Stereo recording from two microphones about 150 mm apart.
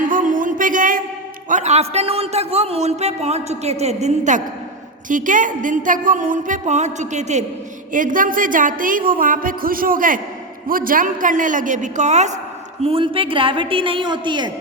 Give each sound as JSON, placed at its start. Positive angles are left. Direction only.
{"t": 0.1, "sound": "a sound", "side_deg": -60}
{"t": 1.5, "sound": "a man's voice", "side_deg": -50}
{"t": 7.9, "sound": "a woman's voice", "side_deg": -65}
{"t": 12.8, "sound": "a woman's voice", "side_deg": -35}